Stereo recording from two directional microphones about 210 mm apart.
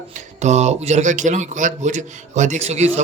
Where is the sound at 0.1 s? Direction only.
35° right (ahead or behind).